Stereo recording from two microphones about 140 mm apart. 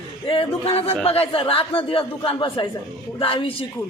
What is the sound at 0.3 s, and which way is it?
Speech, 40° left (ahead or behind).